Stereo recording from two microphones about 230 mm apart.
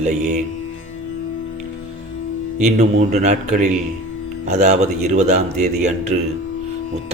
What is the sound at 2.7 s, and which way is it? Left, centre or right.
A man's voice, right.